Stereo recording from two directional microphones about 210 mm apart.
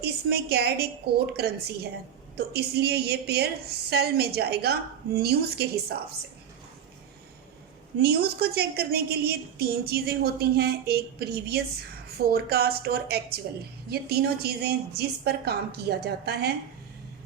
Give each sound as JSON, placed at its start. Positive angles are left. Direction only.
{"t": 0.0, "sound": "a woman's voice", "side_deg": -50}
{"t": 7.9, "sound": "a woman's voice", "side_deg": -50}